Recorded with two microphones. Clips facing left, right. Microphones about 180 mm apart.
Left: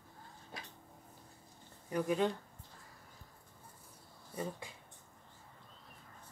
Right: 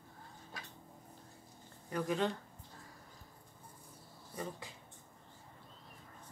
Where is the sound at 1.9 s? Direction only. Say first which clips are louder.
Left 2 dB; 10° left (ahead or behind).